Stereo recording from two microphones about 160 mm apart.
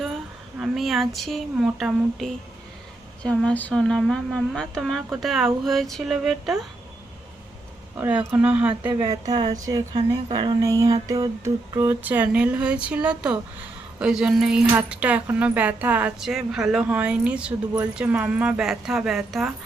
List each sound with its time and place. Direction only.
0.6 s speech: centre (ahead or behind)
7.9 s speech: 15° right (ahead or behind)
8.9 s speech: 30° right (ahead or behind); by 19.5 s centre (ahead or behind)